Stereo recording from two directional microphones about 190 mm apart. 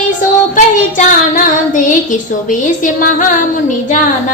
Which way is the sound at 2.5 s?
45° left (ahead or behind).